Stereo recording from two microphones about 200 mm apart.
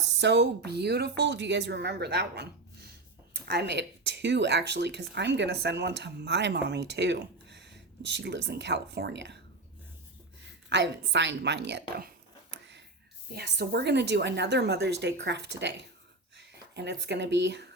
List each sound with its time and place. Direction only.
0.0 s speech: 60° right (ahead or behind)
10.4 s a sound: 60° right (ahead or behind)
13.3 s speech: 55° right (ahead or behind)